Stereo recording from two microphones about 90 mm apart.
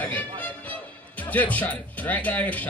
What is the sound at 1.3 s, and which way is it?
Speech, 20° left (ahead or behind).